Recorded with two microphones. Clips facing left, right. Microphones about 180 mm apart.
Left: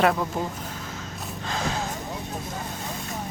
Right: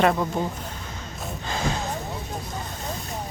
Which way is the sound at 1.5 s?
Centre (ahead or behind).